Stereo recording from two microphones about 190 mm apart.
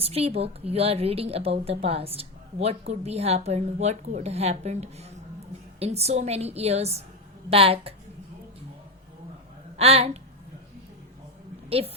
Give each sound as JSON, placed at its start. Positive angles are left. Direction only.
{"t": 0.0, "sound": "a woman's voice", "side_deg": -30}
{"t": 9.7, "sound": "a woman's voice", "side_deg": -30}